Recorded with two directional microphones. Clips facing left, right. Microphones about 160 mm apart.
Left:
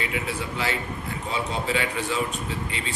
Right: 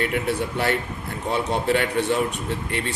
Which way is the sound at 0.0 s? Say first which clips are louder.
Right 6 dB; 55° right (ahead or behind).